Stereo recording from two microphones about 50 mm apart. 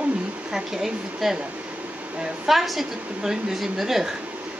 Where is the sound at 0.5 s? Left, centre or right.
Centre.